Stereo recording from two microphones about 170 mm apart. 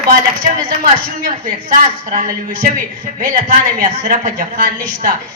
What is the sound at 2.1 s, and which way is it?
A woman's voice, 55° right (ahead or behind).